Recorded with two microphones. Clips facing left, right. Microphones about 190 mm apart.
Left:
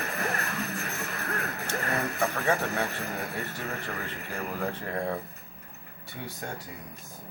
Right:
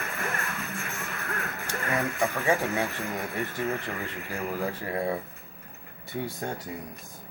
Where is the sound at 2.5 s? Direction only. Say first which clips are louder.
Right 3 dB; 10° right (ahead or behind).